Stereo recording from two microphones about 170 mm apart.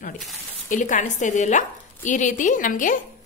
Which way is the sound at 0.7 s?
50° left (ahead or behind).